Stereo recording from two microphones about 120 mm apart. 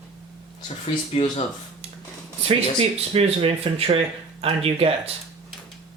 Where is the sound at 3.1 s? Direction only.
55° right (ahead or behind).